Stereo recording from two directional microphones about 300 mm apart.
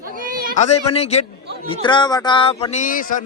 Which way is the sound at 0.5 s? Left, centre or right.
Left.